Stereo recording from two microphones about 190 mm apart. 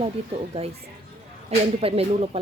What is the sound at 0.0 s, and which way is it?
Speech, 30° right (ahead or behind).